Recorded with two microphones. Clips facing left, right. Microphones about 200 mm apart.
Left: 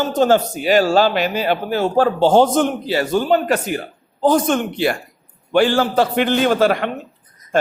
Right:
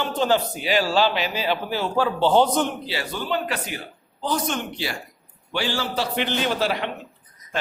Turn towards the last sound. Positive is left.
turn(degrees=50)  # may be behind; listen again after turning